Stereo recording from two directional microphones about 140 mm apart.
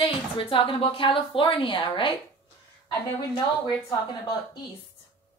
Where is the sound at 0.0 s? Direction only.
35° left (ahead or behind).